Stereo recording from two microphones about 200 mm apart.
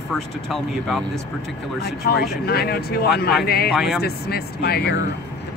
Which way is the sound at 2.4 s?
50° left (ahead or behind).